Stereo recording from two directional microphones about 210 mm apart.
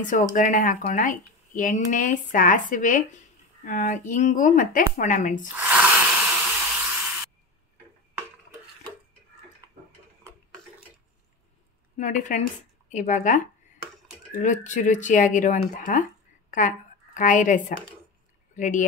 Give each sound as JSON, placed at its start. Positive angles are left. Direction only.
{"t": 0.0, "sound": "speech", "side_deg": 40}
{"t": 5.5, "sound": "a sound", "side_deg": -5}
{"t": 12.0, "sound": "a woman's voice", "side_deg": 35}